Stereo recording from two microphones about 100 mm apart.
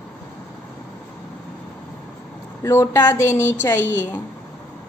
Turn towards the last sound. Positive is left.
turn(degrees=25)  # may be behind; listen again after turning